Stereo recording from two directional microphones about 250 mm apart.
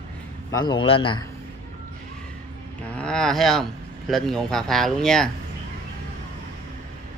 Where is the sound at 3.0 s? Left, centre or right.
Centre.